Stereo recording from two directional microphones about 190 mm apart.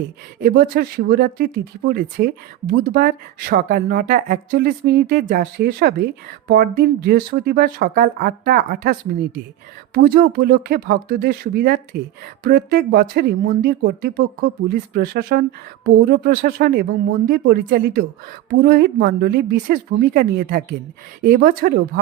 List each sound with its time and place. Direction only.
0.4 s speech: 50° right (ahead or behind)